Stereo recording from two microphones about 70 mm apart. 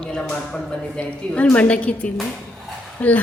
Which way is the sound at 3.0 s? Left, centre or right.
Left.